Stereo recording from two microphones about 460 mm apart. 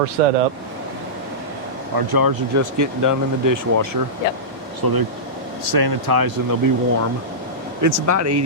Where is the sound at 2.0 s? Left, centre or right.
Right.